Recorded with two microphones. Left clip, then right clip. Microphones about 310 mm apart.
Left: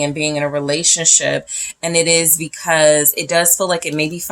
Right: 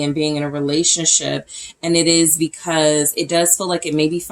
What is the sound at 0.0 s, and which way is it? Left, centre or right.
Speech, left.